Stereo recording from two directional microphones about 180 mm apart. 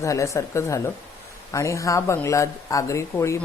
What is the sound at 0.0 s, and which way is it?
A woman's voice, 15° left (ahead or behind).